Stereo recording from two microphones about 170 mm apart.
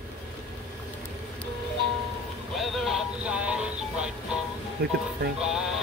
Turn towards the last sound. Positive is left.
turn(degrees=-5)  # may be behind; listen again after turning